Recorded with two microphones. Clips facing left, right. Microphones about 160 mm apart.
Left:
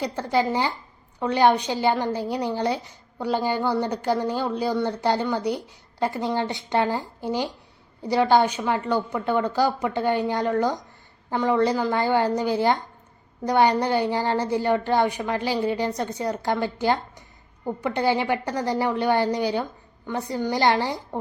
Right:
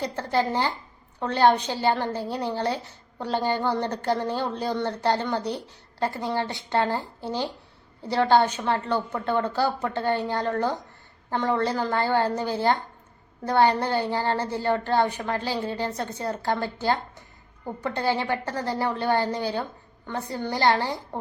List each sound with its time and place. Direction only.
0.0 s a woman's voice: 10° left (ahead or behind)